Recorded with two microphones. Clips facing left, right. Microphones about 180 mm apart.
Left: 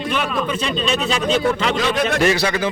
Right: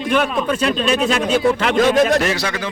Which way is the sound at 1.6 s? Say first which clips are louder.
Right 5 dB; 50° right (ahead or behind).